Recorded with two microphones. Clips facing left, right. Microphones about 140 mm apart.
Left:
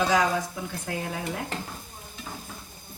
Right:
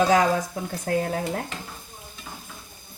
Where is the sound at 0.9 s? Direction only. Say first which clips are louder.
Right 9 dB; 40° right (ahead or behind).